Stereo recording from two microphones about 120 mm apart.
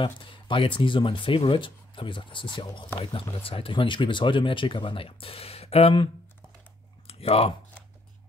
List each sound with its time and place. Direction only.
0.0 s speech: 45° left (ahead or behind)
7.1 s speech: 55° left (ahead or behind)